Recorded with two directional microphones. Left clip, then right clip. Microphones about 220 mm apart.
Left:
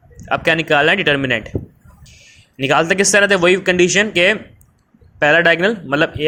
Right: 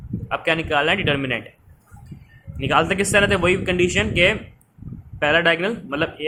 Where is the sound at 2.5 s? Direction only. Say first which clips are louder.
Left 4 dB; 25° left (ahead or behind).